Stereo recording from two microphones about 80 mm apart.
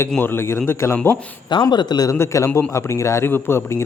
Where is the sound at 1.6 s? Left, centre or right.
Left.